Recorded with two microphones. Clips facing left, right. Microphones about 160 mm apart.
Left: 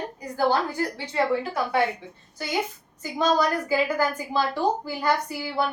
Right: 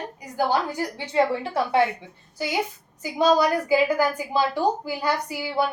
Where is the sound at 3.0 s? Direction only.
10° right (ahead or behind).